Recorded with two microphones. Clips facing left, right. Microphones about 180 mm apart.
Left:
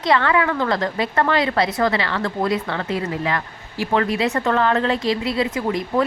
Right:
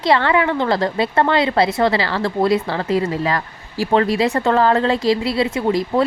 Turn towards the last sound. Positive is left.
turn(degrees=-35)  # may be behind; listen again after turning